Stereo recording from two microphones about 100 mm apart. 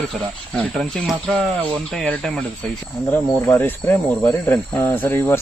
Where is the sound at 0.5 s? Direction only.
5° left (ahead or behind).